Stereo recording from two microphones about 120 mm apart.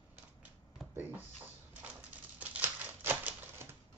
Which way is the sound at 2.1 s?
15° right (ahead or behind).